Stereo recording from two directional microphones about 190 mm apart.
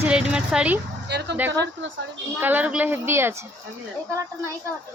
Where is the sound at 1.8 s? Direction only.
75° right (ahead or behind).